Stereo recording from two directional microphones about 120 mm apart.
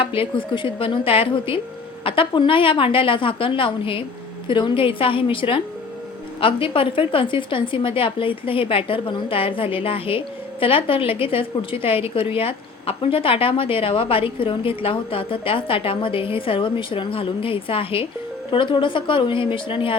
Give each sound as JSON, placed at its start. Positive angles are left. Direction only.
{"t": 0.0, "sound": "a woman's voice", "side_deg": 50}